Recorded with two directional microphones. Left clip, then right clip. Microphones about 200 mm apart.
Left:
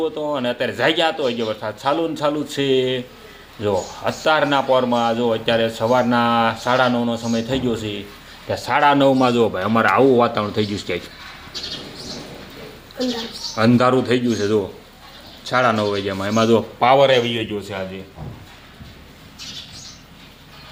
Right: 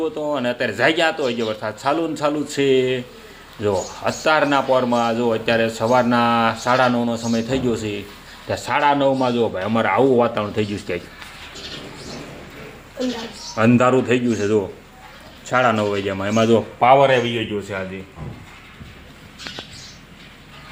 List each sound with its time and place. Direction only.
0.0 s a man's voice: 5° right (ahead or behind)
8.7 s a man's voice: 30° left (ahead or behind)
9.0 s a man's voice: 45° left (ahead or behind)
9.2 s speech: 30° left (ahead or behind); by 11.0 s 10° left (ahead or behind)
13.6 s a man's voice: 5° left (ahead or behind)